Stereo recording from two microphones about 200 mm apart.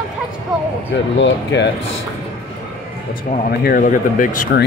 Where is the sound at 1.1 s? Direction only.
60° left (ahead or behind).